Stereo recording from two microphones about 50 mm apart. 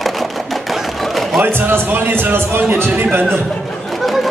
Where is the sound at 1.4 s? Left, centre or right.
Right.